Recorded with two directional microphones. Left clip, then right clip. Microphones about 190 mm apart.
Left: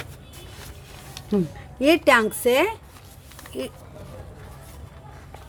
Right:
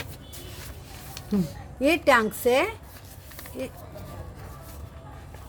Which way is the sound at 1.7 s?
25° left (ahead or behind).